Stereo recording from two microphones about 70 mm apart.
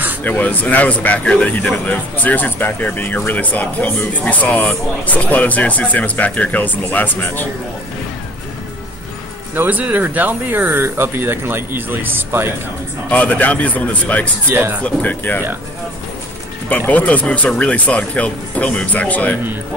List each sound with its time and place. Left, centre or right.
0.2 s speech: left
9.6 s speech: right
13.1 s speech: left
14.5 s speech: right
14.8 s speech: left
16.6 s speech: left